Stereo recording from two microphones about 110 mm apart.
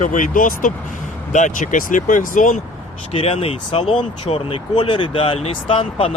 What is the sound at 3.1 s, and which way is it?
Speech, 65° left (ahead or behind).